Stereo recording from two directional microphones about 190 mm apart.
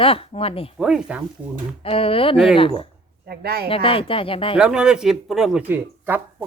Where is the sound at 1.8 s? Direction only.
30° left (ahead or behind).